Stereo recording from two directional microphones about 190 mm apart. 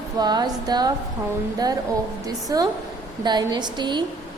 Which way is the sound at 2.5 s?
20° right (ahead or behind).